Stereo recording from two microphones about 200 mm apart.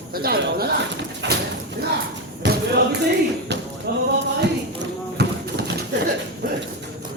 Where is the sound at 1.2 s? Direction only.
60° right (ahead or behind).